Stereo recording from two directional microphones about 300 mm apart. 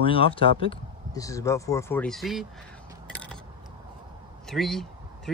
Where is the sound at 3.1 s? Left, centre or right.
Centre.